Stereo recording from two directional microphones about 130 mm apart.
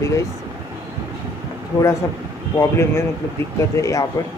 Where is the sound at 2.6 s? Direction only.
20° left (ahead or behind).